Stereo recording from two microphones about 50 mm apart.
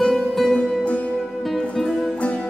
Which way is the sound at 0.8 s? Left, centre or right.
Left.